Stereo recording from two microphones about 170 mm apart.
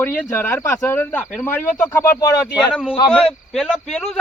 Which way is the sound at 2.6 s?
Centre (ahead or behind).